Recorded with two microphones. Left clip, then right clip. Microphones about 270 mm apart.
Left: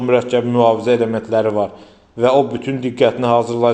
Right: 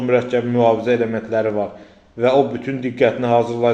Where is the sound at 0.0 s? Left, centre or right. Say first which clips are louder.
Left 2 dB; centre.